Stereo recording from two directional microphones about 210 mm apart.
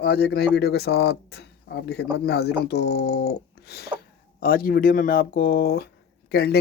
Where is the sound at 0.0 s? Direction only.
50° left (ahead or behind).